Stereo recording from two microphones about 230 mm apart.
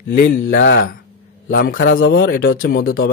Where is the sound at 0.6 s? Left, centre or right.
Left.